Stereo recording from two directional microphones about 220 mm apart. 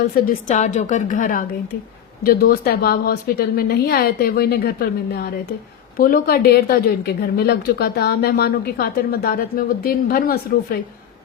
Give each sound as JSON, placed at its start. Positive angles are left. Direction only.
{"t": 0.0, "sound": "a woman's voice", "side_deg": 40}
{"t": 6.0, "sound": "speech", "side_deg": 40}